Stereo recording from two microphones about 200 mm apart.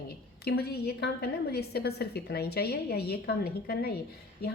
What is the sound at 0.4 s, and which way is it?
Speech, 50° left (ahead or behind).